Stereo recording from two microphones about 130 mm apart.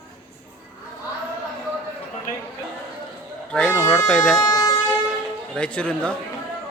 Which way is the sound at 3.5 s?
10° left (ahead or behind).